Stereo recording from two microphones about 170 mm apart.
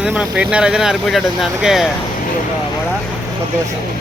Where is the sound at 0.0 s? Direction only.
5° right (ahead or behind).